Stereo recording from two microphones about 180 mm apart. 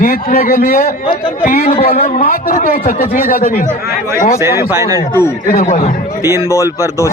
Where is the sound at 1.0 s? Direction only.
30° left (ahead or behind).